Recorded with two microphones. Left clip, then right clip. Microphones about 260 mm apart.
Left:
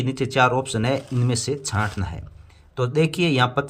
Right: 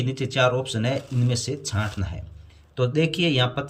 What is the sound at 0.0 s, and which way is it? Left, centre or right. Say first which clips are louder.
Speech: left 3 dB; centre.